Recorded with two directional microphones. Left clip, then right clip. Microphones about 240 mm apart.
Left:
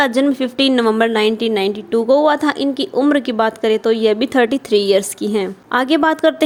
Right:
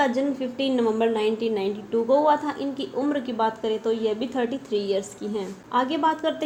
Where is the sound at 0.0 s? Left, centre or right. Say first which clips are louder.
Left 8 dB; left.